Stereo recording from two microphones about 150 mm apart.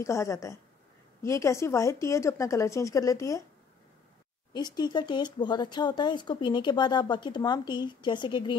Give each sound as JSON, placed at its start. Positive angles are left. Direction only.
{"t": 0.0, "sound": "speech", "side_deg": 20}
{"t": 4.6, "sound": "speech", "side_deg": 30}